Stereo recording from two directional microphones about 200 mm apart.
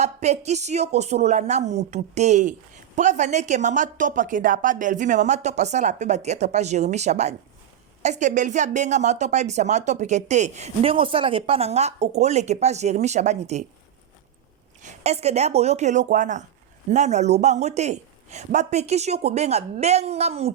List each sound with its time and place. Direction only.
0.0 s speech: 35° right (ahead or behind)
14.8 s speech: 35° right (ahead or behind)